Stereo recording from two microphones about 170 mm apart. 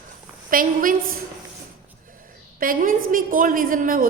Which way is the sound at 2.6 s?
55° right (ahead or behind).